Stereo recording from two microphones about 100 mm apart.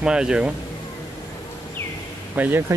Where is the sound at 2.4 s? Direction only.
20° right (ahead or behind).